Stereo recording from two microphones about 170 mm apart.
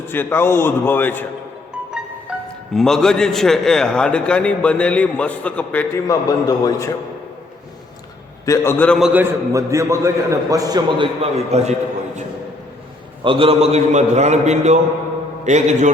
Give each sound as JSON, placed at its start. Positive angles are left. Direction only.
{"t": 0.1, "sound": "a man's voice", "side_deg": 10}
{"t": 2.3, "sound": "music", "side_deg": -5}
{"t": 2.7, "sound": "a man's voice", "side_deg": 5}
{"t": 6.1, "sound": "a man's voice", "side_deg": 20}
{"t": 8.4, "sound": "a man's voice", "side_deg": 15}
{"t": 9.0, "sound": "a man's voice", "side_deg": -5}
{"t": 13.2, "sound": "a man's voice", "side_deg": -30}